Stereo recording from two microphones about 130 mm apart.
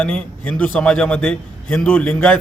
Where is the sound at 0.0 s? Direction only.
10° left (ahead or behind).